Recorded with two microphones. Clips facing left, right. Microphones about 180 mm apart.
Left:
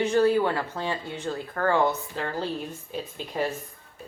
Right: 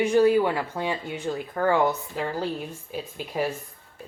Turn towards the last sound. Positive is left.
turn(degrees=-10)  # may be behind; listen again after turning